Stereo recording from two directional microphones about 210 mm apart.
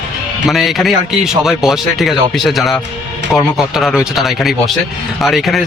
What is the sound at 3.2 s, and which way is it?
Speech, 60° right (ahead or behind).